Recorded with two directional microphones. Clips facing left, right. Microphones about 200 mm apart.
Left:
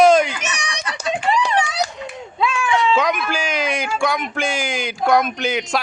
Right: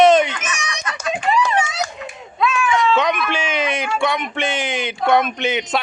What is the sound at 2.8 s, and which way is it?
Speech, centre (ahead or behind).